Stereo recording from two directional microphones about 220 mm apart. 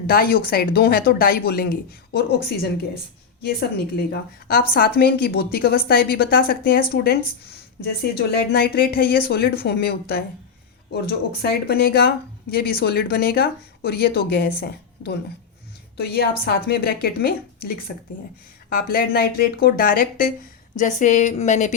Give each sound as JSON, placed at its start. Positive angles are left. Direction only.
{"t": 0.1, "sound": "a woman's voice", "side_deg": 45}
{"t": 11.4, "sound": "a woman's voice", "side_deg": 45}